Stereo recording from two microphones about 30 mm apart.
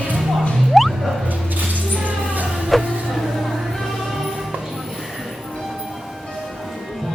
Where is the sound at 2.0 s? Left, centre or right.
Right.